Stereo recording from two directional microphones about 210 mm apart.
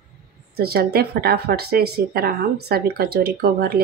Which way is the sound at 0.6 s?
50° right (ahead or behind).